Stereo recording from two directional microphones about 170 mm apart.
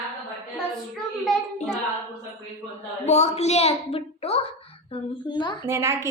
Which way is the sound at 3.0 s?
40° left (ahead or behind).